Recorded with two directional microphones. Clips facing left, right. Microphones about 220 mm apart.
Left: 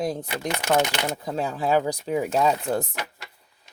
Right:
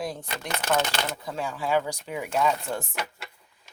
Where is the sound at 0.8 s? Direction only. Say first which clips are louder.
Left 5 dB; 15° left (ahead or behind).